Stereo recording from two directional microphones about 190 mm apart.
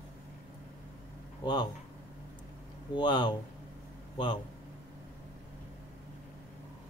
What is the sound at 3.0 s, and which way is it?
Speech, 25° left (ahead or behind).